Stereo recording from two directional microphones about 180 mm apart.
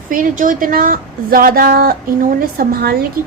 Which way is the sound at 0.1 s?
50° right (ahead or behind).